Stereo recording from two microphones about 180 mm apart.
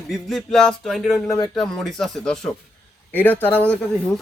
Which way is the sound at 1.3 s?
20° left (ahead or behind).